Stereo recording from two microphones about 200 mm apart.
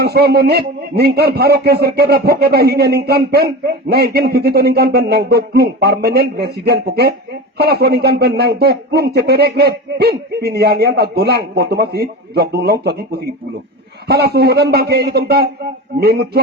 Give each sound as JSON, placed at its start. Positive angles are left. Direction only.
{"t": 0.0, "sound": "a man's voice", "side_deg": -55}